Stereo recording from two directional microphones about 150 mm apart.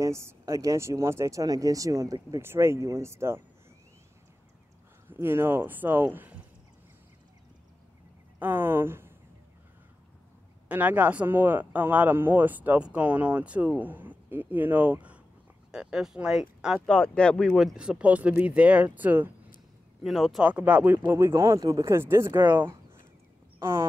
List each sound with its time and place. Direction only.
0.0 s speech: 20° right (ahead or behind)
5.0 s speech: 15° right (ahead or behind)
8.4 s speech: 15° right (ahead or behind)
10.7 s speech: 10° right (ahead or behind)
20.0 s speech: centre (ahead or behind); by 23.9 s 15° right (ahead or behind)